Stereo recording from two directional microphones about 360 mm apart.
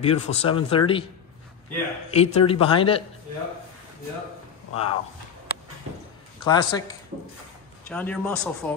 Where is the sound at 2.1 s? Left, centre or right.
Centre.